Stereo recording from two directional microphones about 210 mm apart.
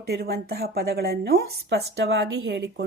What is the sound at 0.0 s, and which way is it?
Speech, 50° right (ahead or behind).